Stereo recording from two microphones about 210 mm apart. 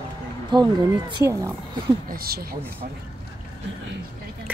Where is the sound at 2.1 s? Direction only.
45° right (ahead or behind).